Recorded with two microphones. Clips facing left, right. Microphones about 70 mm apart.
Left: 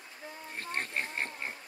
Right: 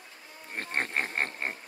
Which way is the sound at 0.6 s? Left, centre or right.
Right.